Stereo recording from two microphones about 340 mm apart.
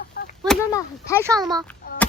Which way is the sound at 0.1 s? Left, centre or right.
Left.